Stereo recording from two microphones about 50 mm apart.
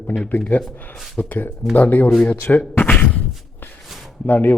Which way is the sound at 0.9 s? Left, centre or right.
Centre.